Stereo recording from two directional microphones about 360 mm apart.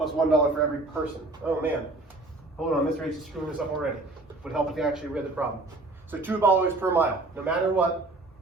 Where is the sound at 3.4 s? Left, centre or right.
Centre.